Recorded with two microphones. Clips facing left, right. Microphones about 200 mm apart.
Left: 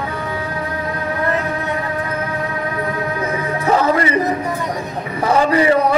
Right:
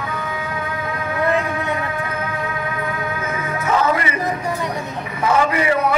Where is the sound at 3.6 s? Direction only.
35° left (ahead or behind).